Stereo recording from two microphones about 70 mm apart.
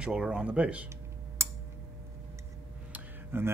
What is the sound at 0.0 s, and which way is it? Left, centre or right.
Speech, centre.